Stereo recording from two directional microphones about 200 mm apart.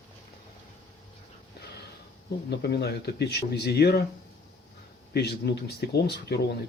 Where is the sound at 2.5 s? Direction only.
55° left (ahead or behind).